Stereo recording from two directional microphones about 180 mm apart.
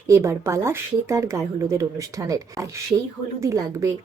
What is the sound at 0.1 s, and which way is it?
Speech, 15° right (ahead or behind).